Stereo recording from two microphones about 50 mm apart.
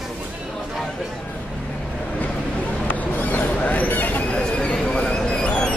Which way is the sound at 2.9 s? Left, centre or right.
Left.